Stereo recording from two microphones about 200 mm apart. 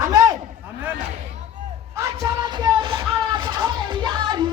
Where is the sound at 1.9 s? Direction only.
15° right (ahead or behind).